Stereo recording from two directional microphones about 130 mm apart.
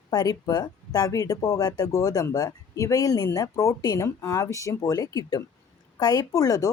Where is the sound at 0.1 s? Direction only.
30° left (ahead or behind).